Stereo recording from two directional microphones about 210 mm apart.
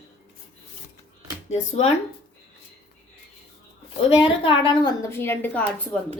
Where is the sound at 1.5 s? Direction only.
30° left (ahead or behind).